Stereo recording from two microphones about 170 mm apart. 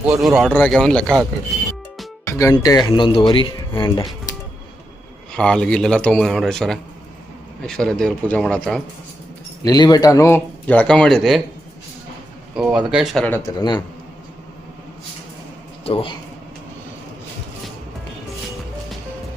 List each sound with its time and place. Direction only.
0.2 s a man's voice: centre (ahead or behind)
1.0 s a man's voice: 5° right (ahead or behind)
2.2 s speech: 20° left (ahead or behind)
5.3 s a man's voice: 5° left (ahead or behind)
9.6 s speech: 25° left (ahead or behind); by 11.4 s centre (ahead or behind)
12.5 s a man's voice: 5° right (ahead or behind)
13.2 s speech: 10° left (ahead or behind)
13.6 s speech: 25° left (ahead or behind)
15.8 s a man's voice: 35° left (ahead or behind)